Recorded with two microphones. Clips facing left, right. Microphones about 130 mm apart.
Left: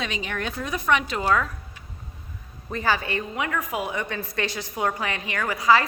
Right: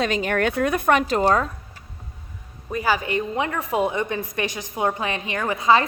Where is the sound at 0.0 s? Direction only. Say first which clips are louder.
Right 8 dB; 50° right (ahead or behind).